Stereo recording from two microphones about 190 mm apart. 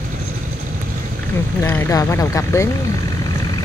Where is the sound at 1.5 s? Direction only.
10° left (ahead or behind).